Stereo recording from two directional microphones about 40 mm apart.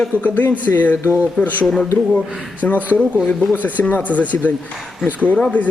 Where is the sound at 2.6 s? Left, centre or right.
Left.